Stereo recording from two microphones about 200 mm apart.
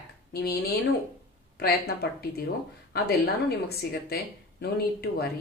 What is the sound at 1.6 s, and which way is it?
A woman's voice, 50° left (ahead or behind).